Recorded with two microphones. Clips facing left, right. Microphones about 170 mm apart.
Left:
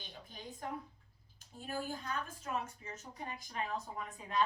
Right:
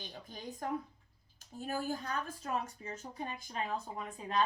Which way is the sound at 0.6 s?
40° right (ahead or behind).